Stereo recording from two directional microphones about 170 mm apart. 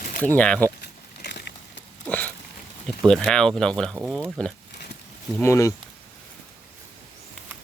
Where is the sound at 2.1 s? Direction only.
10° left (ahead or behind).